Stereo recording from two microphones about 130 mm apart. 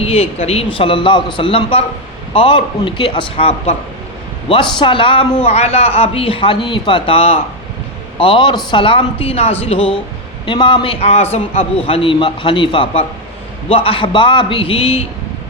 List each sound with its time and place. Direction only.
0.0 s a man's voice: 50° left (ahead or behind)